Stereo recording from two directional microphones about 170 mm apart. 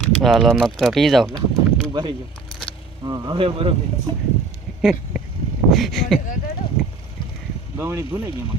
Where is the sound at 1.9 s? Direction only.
25° right (ahead or behind).